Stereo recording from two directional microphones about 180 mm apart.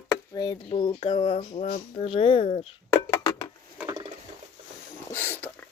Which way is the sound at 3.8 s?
20° right (ahead or behind).